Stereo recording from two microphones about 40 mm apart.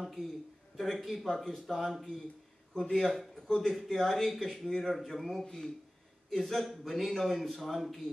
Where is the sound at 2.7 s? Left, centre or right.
Centre.